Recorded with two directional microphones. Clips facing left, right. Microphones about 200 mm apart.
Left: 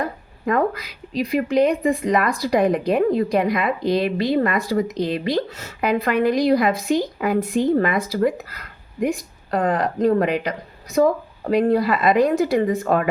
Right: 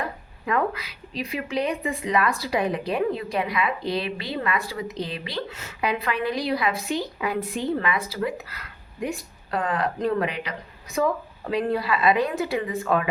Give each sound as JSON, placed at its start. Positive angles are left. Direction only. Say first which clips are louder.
{"t": 0.0, "sound": "speech", "louder": "left 6 dB", "side_deg": 45}